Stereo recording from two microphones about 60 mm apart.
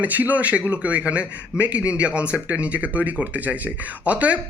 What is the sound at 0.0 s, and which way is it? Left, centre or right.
Speech, right.